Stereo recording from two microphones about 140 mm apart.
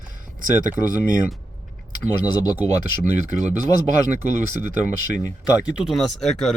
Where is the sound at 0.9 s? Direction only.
75° right (ahead or behind).